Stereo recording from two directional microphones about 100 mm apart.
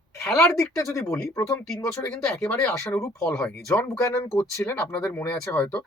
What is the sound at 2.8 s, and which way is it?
Speech, 25° left (ahead or behind).